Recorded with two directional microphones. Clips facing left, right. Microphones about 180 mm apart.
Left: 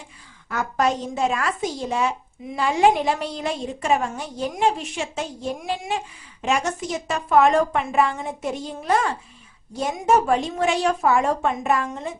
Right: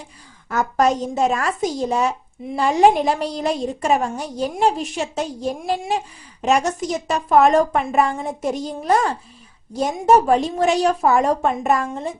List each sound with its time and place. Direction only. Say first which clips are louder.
0.4 s a woman's voice: right 4 dB; 40° right (ahead or behind)